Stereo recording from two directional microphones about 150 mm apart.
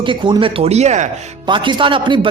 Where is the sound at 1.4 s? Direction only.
30° right (ahead or behind).